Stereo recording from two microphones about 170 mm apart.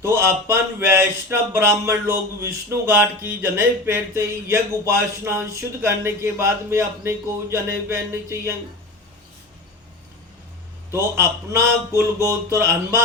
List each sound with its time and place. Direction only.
0.0 s speech: 15° right (ahead or behind)
10.9 s speech: 15° right (ahead or behind)